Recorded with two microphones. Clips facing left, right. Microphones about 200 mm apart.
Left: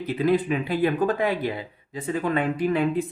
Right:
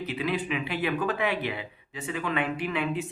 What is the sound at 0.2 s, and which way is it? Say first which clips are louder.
Speech: left 9 dB; 45° left (ahead or behind).